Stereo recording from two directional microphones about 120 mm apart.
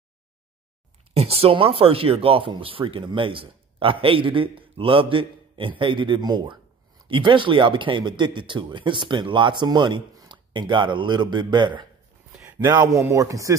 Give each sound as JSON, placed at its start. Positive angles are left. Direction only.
{"t": 1.1, "sound": "speech", "side_deg": -55}
{"t": 12.4, "sound": "speech", "side_deg": -25}